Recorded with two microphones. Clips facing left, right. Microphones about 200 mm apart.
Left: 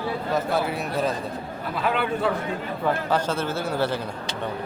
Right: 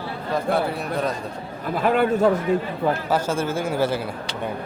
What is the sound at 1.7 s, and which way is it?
Speech, 45° right (ahead or behind).